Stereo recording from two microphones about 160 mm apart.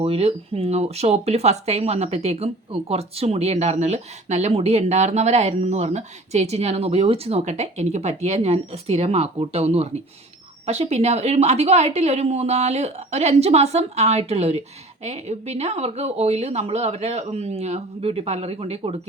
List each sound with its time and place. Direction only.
0.0 s a woman's voice: 40° right (ahead or behind)